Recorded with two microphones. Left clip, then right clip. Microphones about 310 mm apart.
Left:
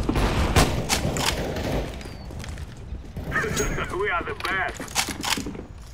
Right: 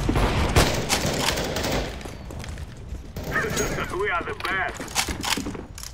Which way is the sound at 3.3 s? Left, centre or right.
Centre.